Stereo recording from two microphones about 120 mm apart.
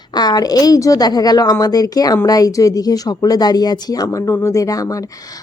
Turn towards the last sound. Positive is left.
turn(degrees=30)  # may be behind; listen again after turning